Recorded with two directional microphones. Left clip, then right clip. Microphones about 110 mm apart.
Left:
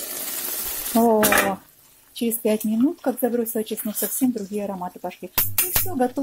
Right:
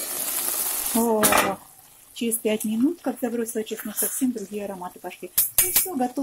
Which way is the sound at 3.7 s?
Centre (ahead or behind).